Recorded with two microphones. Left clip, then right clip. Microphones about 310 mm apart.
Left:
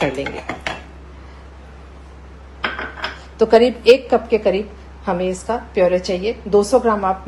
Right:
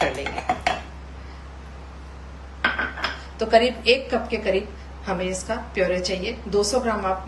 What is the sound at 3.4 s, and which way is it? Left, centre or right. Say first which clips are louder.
A woman's voice: left 6 dB; centre.